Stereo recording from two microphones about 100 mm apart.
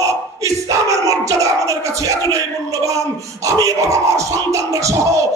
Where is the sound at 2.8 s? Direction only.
35° right (ahead or behind).